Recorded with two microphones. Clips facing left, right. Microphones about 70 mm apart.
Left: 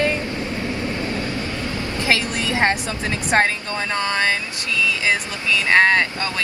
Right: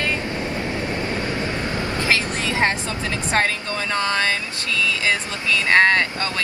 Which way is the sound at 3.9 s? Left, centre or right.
Left.